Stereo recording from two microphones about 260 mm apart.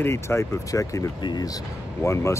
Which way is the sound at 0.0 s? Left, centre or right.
Centre.